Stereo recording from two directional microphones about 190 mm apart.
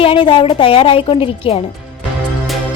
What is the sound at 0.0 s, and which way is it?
Speech, 30° left (ahead or behind).